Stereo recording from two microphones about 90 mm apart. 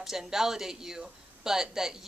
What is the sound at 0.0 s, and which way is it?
A woman's voice, 5° right (ahead or behind).